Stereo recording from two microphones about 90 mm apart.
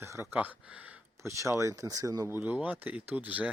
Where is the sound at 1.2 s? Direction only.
35° right (ahead or behind).